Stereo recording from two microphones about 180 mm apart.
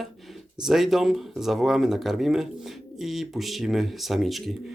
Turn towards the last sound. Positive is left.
turn(degrees=0)  # may be behind; listen again after turning